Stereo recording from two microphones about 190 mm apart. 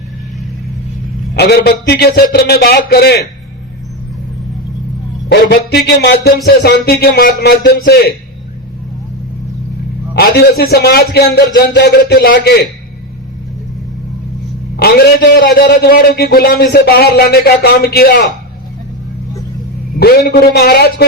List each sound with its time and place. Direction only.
1.3 s a man's voice: 60° left (ahead or behind)
5.3 s a man's voice: 60° left (ahead or behind)
10.2 s a man's voice: 55° left (ahead or behind)
14.8 s a man's voice: 55° left (ahead or behind)
20.0 s a man's voice: 55° left (ahead or behind)